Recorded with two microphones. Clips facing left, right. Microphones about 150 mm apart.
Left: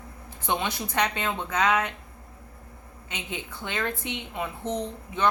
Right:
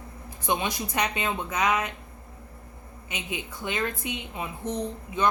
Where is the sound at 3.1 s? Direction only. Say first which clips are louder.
Right 1 dB; 10° right (ahead or behind).